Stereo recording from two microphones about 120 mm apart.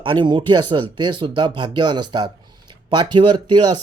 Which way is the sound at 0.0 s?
40° right (ahead or behind).